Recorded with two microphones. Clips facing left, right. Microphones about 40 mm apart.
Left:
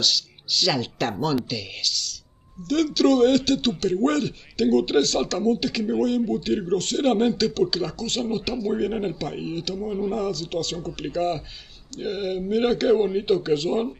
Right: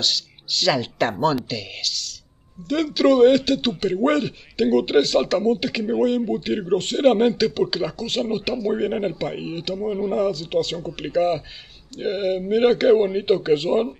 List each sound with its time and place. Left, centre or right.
0.0 s a man's voice: centre